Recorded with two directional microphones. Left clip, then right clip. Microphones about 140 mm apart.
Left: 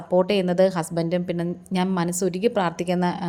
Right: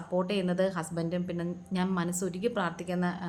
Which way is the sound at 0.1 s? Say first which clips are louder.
Left 10 dB; 40° left (ahead or behind).